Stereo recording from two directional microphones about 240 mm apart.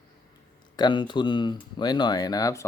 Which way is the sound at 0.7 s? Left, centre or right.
Centre.